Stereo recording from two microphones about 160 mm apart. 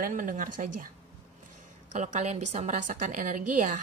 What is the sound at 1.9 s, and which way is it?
Speech, 50° right (ahead or behind).